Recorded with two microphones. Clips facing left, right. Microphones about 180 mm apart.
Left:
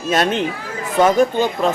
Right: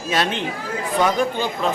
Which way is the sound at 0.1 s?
45° left (ahead or behind).